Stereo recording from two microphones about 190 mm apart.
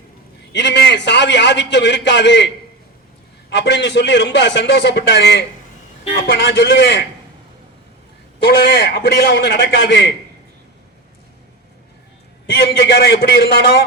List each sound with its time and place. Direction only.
0.5 s a man's voice: 65° left (ahead or behind)
3.5 s a man's voice: 65° left (ahead or behind)
8.4 s a man's voice: 55° left (ahead or behind)
12.5 s a man's voice: 65° left (ahead or behind)